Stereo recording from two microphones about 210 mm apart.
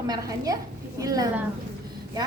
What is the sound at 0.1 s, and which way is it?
A woman's voice, 15° right (ahead or behind).